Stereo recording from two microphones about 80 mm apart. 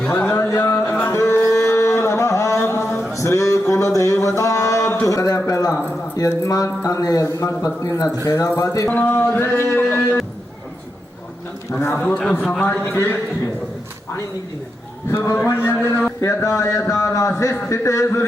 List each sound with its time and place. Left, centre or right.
0.3 s a sound: left
3.1 s music: left
5.0 s a man's voice: left
8.9 s music: centre
12.0 s a man's voice: centre
12.8 s music: left
15.1 s a man's voice: left
15.5 s music: left
16.2 s a man's voice: left